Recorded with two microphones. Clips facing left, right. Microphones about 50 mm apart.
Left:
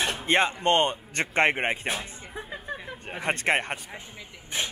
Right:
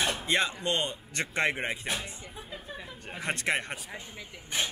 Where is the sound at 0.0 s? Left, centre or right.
Left.